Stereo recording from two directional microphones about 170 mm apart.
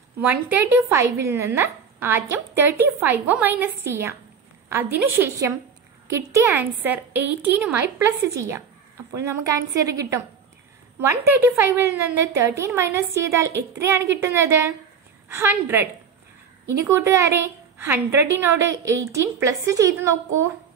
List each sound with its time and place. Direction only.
0.2 s a woman's voice: 10° right (ahead or behind)
16.9 s speech: 15° right (ahead or behind)